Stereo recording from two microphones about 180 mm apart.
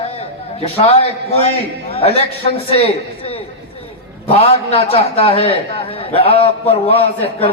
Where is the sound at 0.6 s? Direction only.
35° left (ahead or behind).